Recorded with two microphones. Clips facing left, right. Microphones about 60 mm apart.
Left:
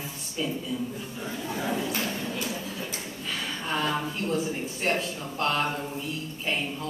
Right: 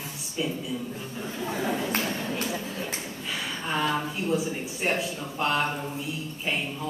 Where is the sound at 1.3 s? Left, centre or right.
Right.